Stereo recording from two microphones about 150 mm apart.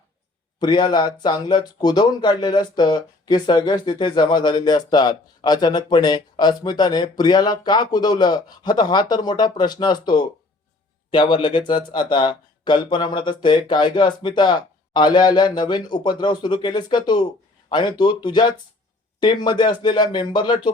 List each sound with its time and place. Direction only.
0.6 s speech: 30° left (ahead or behind)